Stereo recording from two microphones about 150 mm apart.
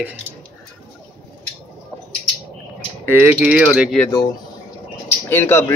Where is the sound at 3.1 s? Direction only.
10° right (ahead or behind).